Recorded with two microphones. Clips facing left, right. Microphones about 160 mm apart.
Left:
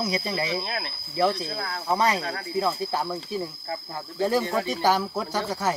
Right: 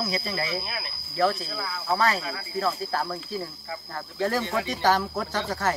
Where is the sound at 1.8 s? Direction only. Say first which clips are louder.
Left 1 dB; 20° left (ahead or behind).